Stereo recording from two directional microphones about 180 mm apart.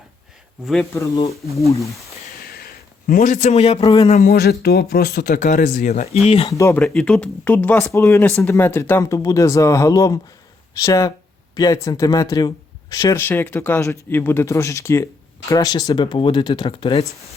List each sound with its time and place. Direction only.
0.6 s speech: 5° left (ahead or behind)
1.1 s speech: 30° left (ahead or behind)
1.5 s speech: 15° left (ahead or behind)
2.5 s a sound: 55° left (ahead or behind); by 3.9 s 35° left (ahead or behind)
4.2 s speech: 60° left (ahead or behind)
6.2 s speech: 35° left (ahead or behind)
6.5 s speech: 15° left (ahead or behind)
6.8 s speech: 5° left (ahead or behind); by 17.1 s 30° left (ahead or behind)